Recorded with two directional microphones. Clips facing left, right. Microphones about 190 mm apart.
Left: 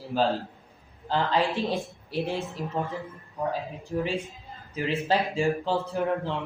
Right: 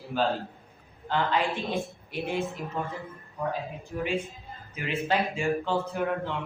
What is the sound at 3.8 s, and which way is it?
A man's voice, 35° left (ahead or behind).